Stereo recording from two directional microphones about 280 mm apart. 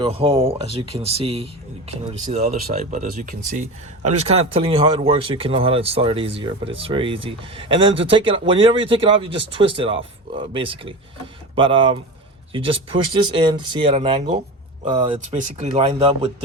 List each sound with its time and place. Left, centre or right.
0.0 s speech: centre
13.8 s speech: right